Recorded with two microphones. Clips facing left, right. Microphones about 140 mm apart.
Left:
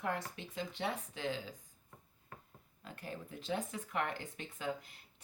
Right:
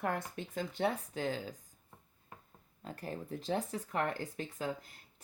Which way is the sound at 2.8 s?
40° right (ahead or behind).